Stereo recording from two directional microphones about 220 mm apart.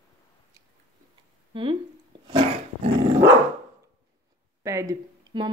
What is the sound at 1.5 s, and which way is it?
Speech, 25° right (ahead or behind).